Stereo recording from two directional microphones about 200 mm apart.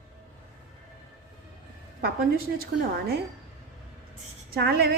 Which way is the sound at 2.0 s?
50° right (ahead or behind).